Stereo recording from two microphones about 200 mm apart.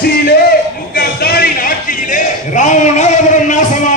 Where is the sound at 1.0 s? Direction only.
50° left (ahead or behind).